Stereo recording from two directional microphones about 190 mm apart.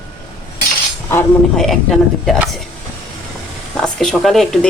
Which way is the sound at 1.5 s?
Centre (ahead or behind).